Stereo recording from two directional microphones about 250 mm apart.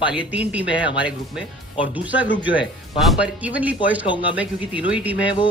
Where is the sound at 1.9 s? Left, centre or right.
Centre.